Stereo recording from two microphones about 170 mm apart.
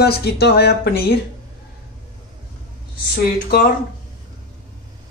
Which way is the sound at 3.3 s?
60° left (ahead or behind).